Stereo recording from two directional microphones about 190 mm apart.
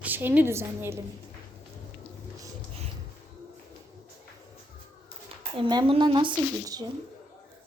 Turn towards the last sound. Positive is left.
turn(degrees=-25)  # may be behind; listen again after turning